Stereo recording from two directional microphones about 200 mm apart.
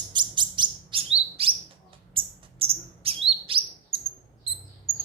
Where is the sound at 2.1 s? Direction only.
30° right (ahead or behind).